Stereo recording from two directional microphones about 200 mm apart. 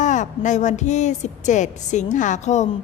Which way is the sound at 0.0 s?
40° left (ahead or behind).